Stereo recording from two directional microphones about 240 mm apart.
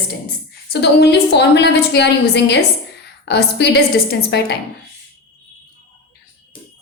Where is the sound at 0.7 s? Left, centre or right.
Left.